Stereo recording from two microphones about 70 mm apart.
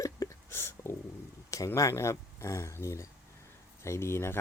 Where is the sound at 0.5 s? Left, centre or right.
Left.